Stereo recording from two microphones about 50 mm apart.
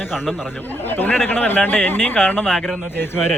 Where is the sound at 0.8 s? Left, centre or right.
Left.